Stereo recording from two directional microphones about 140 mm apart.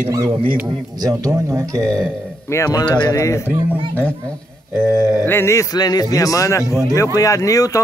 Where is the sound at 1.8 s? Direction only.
5° left (ahead or behind).